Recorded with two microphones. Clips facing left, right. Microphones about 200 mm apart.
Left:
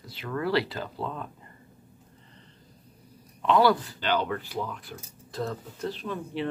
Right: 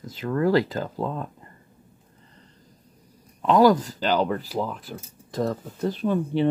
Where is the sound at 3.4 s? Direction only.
45° right (ahead or behind).